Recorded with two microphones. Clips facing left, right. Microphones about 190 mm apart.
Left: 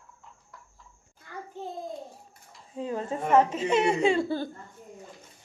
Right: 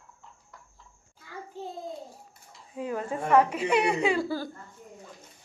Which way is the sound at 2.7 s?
25° left (ahead or behind).